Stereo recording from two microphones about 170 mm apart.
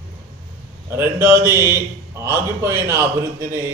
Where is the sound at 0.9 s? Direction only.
15° right (ahead or behind).